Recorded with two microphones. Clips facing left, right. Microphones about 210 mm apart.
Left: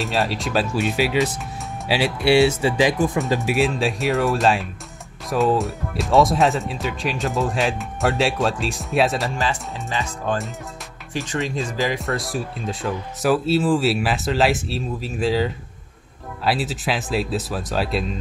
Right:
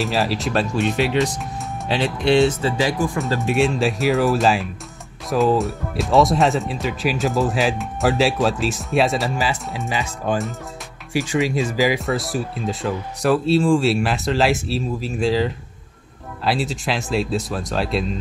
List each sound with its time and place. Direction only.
0.0 s speech: centre (ahead or behind); by 3.1 s 20° left (ahead or behind)
3.3 s speech: centre (ahead or behind)